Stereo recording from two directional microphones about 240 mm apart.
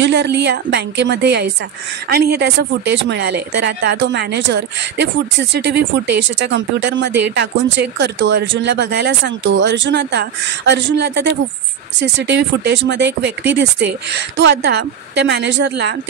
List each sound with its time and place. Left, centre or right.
0.0 s speech: right